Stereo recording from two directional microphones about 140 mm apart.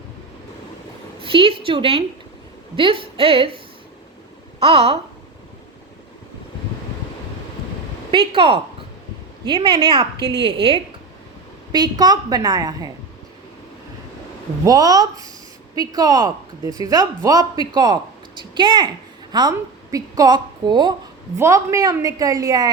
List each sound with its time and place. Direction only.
1.2 s a woman's voice: 40° right (ahead or behind)
4.6 s a woman's voice: 45° right (ahead or behind)
9.5 s a woman's voice: 35° right (ahead or behind)
11.7 s speech: 30° right (ahead or behind)
14.6 s a woman's voice: 25° right (ahead or behind)
21.3 s speech: 20° right (ahead or behind)